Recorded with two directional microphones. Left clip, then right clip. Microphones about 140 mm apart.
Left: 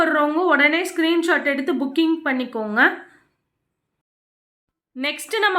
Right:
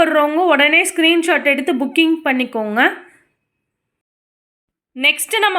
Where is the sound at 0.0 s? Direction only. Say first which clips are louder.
Right 5 dB; 20° right (ahead or behind).